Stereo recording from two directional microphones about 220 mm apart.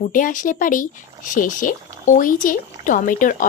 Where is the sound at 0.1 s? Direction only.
35° left (ahead or behind).